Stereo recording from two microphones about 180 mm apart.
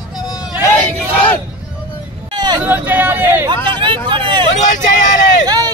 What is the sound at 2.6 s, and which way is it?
Hubbub, 10° right (ahead or behind).